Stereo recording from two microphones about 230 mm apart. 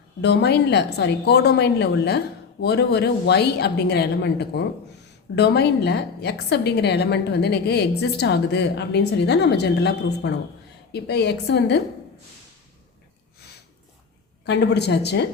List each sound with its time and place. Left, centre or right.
0.2 s a woman's voice: left
14.4 s a woman's voice: left